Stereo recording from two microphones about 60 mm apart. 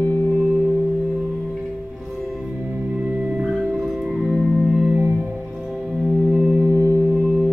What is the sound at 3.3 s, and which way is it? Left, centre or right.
Music, centre.